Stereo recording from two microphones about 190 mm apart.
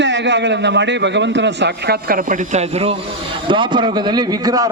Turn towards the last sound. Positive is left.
turn(degrees=-20)  # may be behind; listen again after turning